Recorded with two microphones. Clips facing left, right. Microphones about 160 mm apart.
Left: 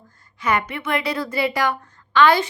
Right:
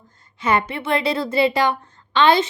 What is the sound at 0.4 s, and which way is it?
A woman's voice, 30° right (ahead or behind).